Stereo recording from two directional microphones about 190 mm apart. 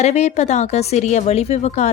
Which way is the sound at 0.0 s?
35° left (ahead or behind).